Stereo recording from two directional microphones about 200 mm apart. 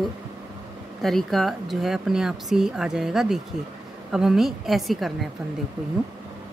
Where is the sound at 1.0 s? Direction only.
Centre (ahead or behind).